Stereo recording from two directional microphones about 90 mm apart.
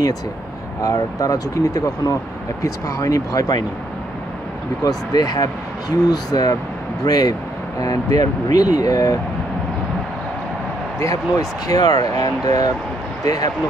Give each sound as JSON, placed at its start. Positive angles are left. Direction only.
{"t": 0.8, "sound": "speech", "side_deg": 40}
{"t": 4.8, "sound": "speech", "side_deg": 45}
{"t": 11.0, "sound": "speech", "side_deg": 40}